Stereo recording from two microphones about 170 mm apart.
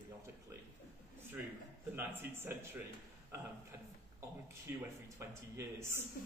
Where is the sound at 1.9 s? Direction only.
15° right (ahead or behind).